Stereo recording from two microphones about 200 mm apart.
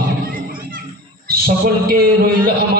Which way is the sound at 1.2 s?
50° right (ahead or behind).